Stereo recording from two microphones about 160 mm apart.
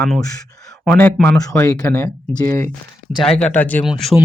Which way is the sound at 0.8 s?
10° left (ahead or behind).